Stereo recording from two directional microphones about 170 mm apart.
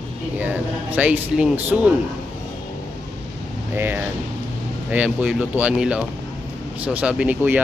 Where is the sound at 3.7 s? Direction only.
10° right (ahead or behind).